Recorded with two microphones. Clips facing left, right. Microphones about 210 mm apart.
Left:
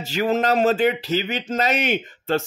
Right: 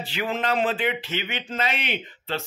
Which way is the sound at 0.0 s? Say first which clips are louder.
Left 7 dB; 45° left (ahead or behind).